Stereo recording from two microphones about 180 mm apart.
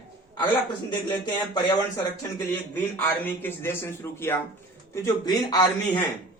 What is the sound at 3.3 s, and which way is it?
Speech, 10° left (ahead or behind).